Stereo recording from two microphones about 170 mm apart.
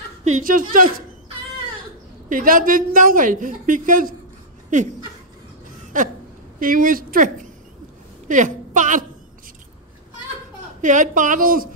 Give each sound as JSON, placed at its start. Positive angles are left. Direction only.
{"t": 0.2, "sound": "a woman's voice", "side_deg": -50}
{"t": 2.2, "sound": "a woman's voice", "side_deg": -55}
{"t": 5.9, "sound": "a woman's voice", "side_deg": -50}
{"t": 8.3, "sound": "a woman's voice", "side_deg": -50}
{"t": 10.8, "sound": "a woman's voice", "side_deg": -50}